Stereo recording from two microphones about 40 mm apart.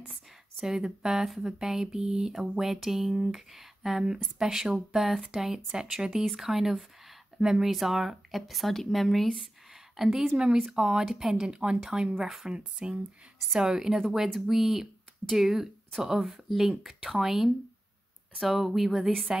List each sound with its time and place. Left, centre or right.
0.6 s speech: centre
2.3 s speech: centre
10.7 s speech: centre
12.2 s speech: centre
12.4 s speech: right
13.6 s speech: centre